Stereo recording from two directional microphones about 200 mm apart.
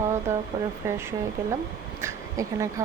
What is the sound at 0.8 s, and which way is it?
A woman's voice, 15° right (ahead or behind).